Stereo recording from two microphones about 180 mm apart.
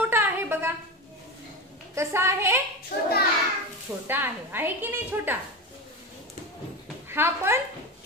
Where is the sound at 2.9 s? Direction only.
60° left (ahead or behind).